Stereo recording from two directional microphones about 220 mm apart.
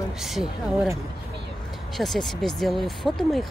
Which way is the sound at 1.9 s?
Centre (ahead or behind).